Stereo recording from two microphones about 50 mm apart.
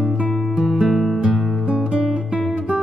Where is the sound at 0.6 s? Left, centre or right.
Centre.